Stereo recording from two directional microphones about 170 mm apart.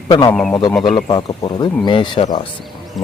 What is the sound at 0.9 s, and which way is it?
A man's voice, 25° left (ahead or behind).